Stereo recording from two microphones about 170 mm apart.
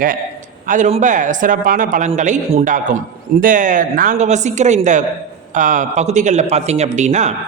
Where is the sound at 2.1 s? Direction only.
40° right (ahead or behind).